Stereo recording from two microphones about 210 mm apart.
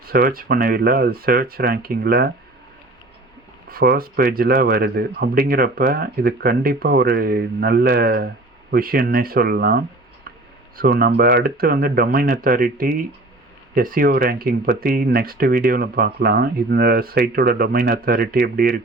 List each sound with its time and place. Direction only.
0.1 s speech: 45° right (ahead or behind)
3.7 s speech: 45° right (ahead or behind)